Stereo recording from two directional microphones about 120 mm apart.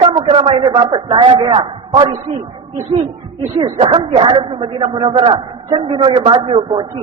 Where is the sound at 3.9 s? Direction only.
45° right (ahead or behind).